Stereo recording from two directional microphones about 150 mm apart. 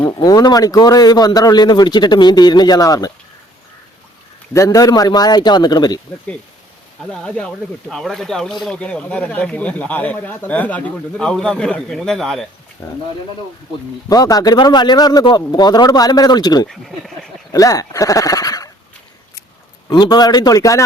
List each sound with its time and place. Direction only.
0.2 s a man's voice: 25° left (ahead or behind)
4.5 s a man's voice: 20° left (ahead or behind)
7.0 s speech: 5° left (ahead or behind)
12.8 s speech: 15° left (ahead or behind)
14.1 s a man's voice: 25° left (ahead or behind)
19.9 s a man's voice: 25° left (ahead or behind)